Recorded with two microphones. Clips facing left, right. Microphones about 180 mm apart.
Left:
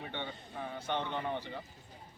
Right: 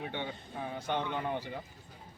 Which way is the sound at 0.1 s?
10° right (ahead or behind).